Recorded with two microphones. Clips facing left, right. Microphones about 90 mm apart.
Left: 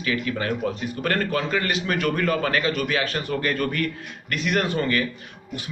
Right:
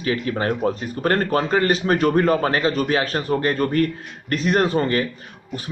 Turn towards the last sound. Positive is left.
turn(degrees=-35)  # may be behind; listen again after turning